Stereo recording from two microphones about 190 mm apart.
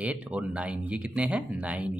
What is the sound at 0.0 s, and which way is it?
Speech, 5° right (ahead or behind).